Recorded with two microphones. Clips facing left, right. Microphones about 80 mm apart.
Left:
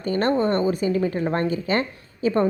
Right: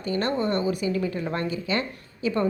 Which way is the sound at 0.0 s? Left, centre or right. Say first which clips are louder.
Left 5 dB; left.